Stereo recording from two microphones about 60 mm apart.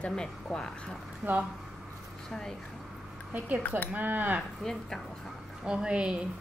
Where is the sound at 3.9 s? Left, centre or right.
Right.